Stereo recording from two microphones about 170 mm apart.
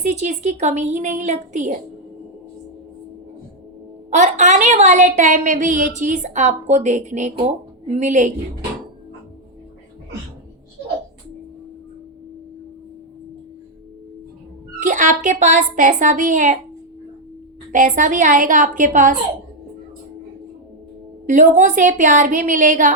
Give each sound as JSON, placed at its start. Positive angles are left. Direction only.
{"t": 0.0, "sound": "a woman's voice", "side_deg": -40}
{"t": 4.1, "sound": "a woman's voice", "side_deg": -45}
{"t": 14.8, "sound": "a woman's voice", "side_deg": -50}
{"t": 17.7, "sound": "a woman's voice", "side_deg": -50}
{"t": 21.2, "sound": "a woman's voice", "side_deg": -45}